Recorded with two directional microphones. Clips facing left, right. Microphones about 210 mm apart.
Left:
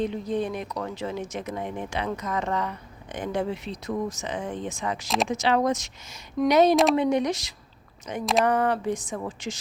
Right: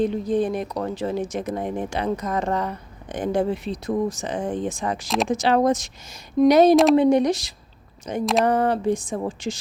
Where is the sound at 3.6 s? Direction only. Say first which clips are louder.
Right 5 dB; 30° right (ahead or behind).